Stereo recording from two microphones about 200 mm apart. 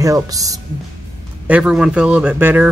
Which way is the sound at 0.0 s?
15° right (ahead or behind).